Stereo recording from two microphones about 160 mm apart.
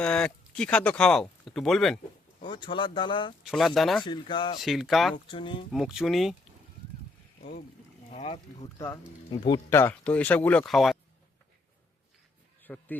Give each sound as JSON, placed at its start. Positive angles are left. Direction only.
{"t": 0.0, "sound": "speech", "side_deg": 5}
{"t": 2.4, "sound": "speech", "side_deg": 30}
{"t": 3.4, "sound": "speech", "side_deg": 0}
{"t": 4.0, "sound": "speech", "side_deg": 30}
{"t": 4.6, "sound": "speech", "side_deg": 0}
{"t": 5.1, "sound": "speech", "side_deg": 30}
{"t": 5.7, "sound": "speech", "side_deg": -5}
{"t": 8.1, "sound": "speech", "side_deg": 40}
{"t": 8.8, "sound": "speech", "side_deg": 20}
{"t": 12.6, "sound": "speech", "side_deg": 10}